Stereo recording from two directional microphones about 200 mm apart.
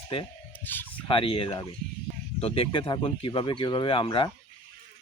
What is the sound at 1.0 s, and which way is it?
Speech, 25° left (ahead or behind).